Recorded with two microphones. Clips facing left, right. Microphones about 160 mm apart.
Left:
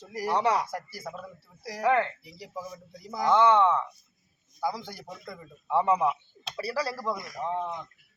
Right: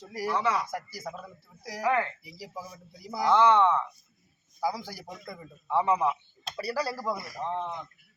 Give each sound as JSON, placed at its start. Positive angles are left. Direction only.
{"t": 0.3, "sound": "speech", "side_deg": 35}
{"t": 0.9, "sound": "speech", "side_deg": 5}
{"t": 3.2, "sound": "a man's voice", "side_deg": 15}
{"t": 4.6, "sound": "speech", "side_deg": -5}
{"t": 5.6, "sound": "a man's voice", "side_deg": 10}
{"t": 7.4, "sound": "a man's voice", "side_deg": 10}